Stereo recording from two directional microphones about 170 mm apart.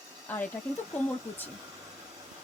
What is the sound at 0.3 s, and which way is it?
Speech, 10° left (ahead or behind).